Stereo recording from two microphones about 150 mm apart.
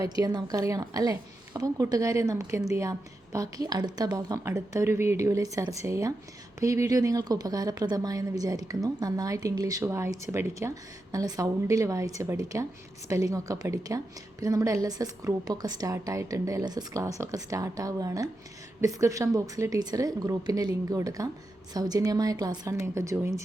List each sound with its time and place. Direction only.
0.0 s a woman's voice: 25° right (ahead or behind)